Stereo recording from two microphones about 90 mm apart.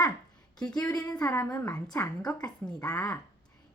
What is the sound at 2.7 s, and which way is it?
Speech, 10° left (ahead or behind).